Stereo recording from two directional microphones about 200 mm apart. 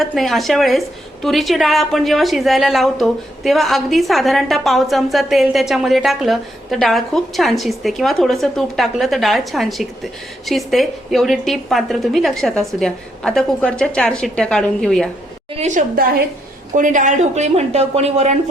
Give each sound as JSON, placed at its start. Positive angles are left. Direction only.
{"t": 0.0, "sound": "a woman's voice", "side_deg": 0}
{"t": 15.5, "sound": "a woman's voice", "side_deg": -35}